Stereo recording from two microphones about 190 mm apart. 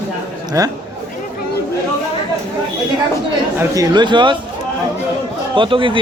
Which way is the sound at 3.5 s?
20° right (ahead or behind).